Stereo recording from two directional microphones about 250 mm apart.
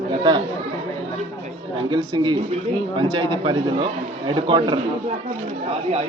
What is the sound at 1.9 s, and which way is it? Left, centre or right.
A man's voice, centre.